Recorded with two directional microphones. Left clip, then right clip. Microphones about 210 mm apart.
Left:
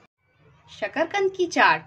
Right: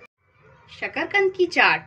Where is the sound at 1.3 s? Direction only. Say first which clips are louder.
Left 1 dB; 35° left (ahead or behind).